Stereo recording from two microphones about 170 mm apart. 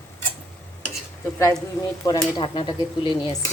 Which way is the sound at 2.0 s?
25° left (ahead or behind).